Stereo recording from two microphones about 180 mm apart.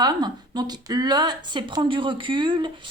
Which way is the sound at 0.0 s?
25° right (ahead or behind).